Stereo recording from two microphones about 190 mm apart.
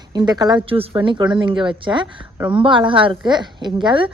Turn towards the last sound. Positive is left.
turn(degrees=-25)  # may be behind; listen again after turning